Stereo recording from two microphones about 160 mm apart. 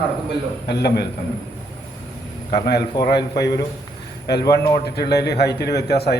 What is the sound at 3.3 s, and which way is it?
Speech, 90° left.